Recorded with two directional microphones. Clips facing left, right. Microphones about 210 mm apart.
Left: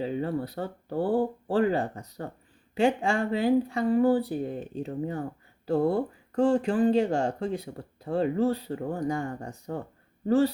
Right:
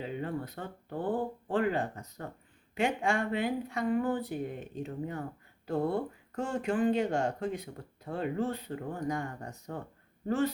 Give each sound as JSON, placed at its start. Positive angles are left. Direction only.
{"t": 0.0, "sound": "speech", "side_deg": 35}